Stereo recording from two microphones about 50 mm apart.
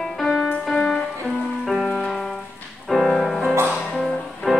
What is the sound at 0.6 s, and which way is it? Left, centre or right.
Music, centre.